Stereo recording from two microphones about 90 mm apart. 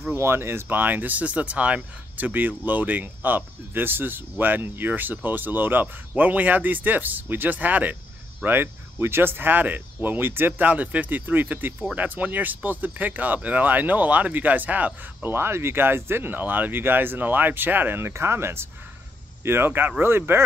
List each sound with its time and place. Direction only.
0.0 s speech: 25° right (ahead or behind)